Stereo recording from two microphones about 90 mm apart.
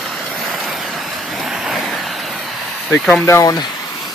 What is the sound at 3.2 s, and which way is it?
Speech, 35° left (ahead or behind).